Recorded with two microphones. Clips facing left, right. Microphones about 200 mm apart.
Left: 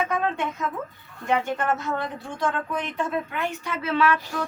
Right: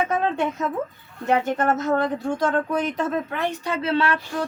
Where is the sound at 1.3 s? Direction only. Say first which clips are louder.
Right 3 dB; 40° right (ahead or behind).